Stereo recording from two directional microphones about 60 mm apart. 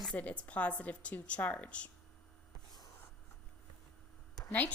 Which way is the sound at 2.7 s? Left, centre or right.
Left.